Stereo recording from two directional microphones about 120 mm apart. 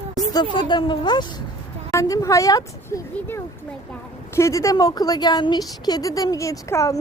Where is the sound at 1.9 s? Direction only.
25° left (ahead or behind).